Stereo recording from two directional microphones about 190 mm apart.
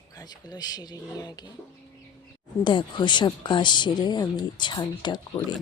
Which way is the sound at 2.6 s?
25° left (ahead or behind).